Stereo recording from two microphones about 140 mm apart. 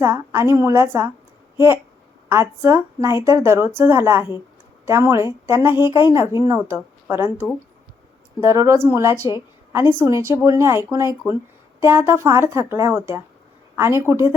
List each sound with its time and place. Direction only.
0.0 s speech: 20° right (ahead or behind)
8.4 s a woman's voice: 20° right (ahead or behind)